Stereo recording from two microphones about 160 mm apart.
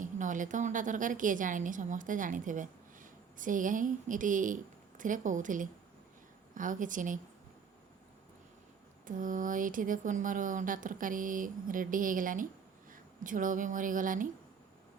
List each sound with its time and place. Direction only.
0.0 s a woman's voice: 55° right (ahead or behind)
9.0 s speech: 55° right (ahead or behind)